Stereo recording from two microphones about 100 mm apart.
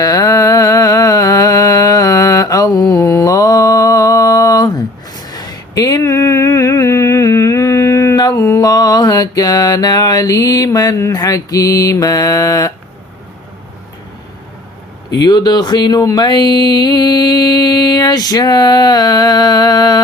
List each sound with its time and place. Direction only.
0.0 s a sound: 40° left (ahead or behind)
8.4 s mantra: 35° left (ahead or behind)
15.2 s speech: 45° left (ahead or behind)